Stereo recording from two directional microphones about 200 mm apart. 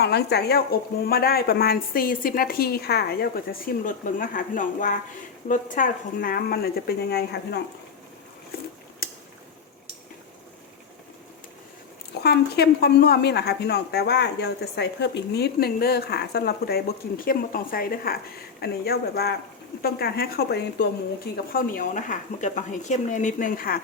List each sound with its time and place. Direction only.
0.0 s speech: 55° left (ahead or behind)
9.0 s a sound: 45° left (ahead or behind)
12.2 s speech: 55° left (ahead or behind)